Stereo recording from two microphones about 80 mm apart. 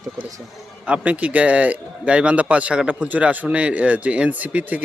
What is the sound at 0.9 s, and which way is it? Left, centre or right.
A man's voice, centre.